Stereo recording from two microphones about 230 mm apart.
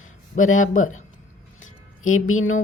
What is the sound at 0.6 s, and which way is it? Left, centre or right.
Speech, left.